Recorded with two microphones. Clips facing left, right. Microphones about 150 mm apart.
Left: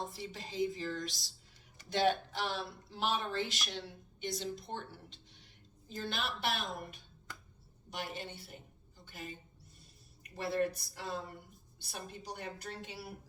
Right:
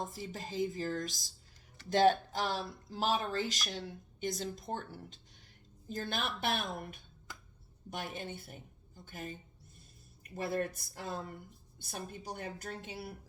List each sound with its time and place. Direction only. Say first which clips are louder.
0.1 s a woman's voice: right 3 dB; 45° right (ahead or behind)
10.3 s a woman's voice: left 1 dB; 50° right (ahead or behind)